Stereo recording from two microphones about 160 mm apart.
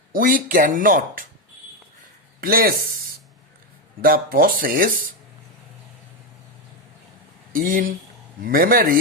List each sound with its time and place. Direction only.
0.1 s speech: 60° right (ahead or behind)
2.4 s speech: 65° right (ahead or behind)
4.0 s speech: 65° right (ahead or behind)
7.5 s speech: 60° right (ahead or behind)